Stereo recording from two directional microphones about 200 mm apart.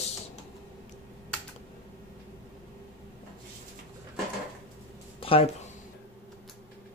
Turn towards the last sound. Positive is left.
turn(degrees=30)  # may be behind; listen again after turning